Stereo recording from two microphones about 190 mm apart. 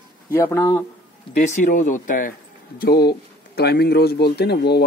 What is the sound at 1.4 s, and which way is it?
Speech, 40° left (ahead or behind).